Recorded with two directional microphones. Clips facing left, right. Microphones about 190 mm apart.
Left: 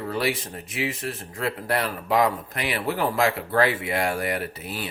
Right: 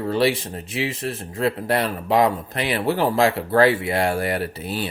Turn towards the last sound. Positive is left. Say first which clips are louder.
# right 4 dB
turn(degrees=-30)  # may be behind; listen again after turning